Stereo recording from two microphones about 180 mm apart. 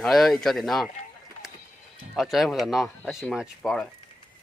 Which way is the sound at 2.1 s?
Centre (ahead or behind).